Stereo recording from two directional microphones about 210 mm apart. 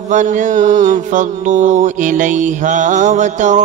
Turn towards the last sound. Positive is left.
turn(degrees=-35)  # may be behind; listen again after turning